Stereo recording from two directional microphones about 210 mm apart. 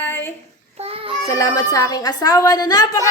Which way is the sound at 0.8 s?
30° right (ahead or behind).